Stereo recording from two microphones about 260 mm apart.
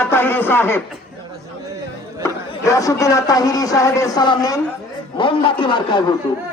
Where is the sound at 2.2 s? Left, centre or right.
Centre.